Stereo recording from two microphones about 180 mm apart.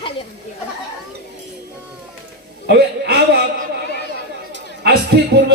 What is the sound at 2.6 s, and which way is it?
Speech, 65° right (ahead or behind).